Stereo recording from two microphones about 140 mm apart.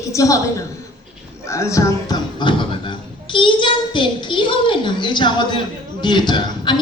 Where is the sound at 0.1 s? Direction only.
25° left (ahead or behind).